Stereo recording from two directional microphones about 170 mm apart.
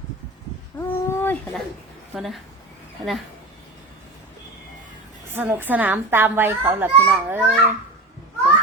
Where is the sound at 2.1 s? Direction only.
Centre (ahead or behind).